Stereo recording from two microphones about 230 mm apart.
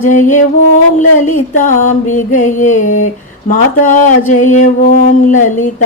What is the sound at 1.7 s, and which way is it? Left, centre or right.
Mantra, left.